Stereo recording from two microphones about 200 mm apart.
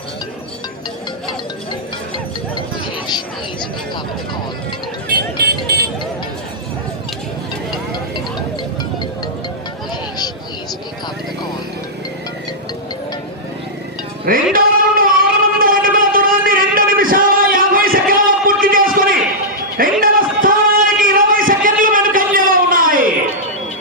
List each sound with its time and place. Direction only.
5.0 s music: 50° right (ahead or behind)
14.3 s music: 45° right (ahead or behind)
19.7 s a sound: 45° right (ahead or behind)